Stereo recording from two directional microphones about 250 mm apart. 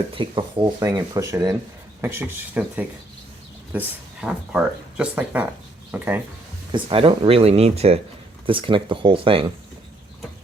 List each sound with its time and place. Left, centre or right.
0.1 s speech: centre
6.7 s speech: centre